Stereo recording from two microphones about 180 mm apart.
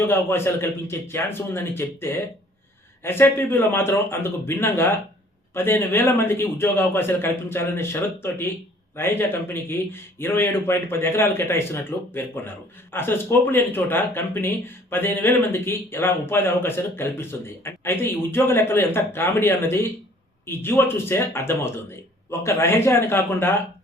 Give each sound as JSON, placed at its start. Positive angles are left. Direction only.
{"t": 0.0, "sound": "a man's voice", "side_deg": 15}